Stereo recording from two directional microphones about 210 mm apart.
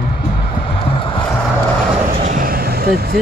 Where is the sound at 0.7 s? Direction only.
25° left (ahead or behind).